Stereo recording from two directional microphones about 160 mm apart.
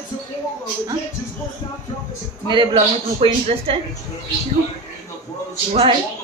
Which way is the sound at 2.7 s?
40° right (ahead or behind).